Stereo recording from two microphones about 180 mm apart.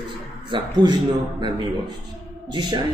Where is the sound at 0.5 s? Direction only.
25° right (ahead or behind).